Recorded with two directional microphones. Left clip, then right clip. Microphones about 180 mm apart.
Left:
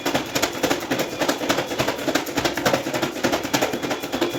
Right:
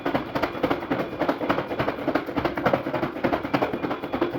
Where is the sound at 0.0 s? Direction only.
20° left (ahead or behind).